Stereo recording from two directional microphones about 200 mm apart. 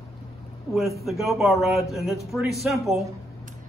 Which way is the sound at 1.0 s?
Centre (ahead or behind).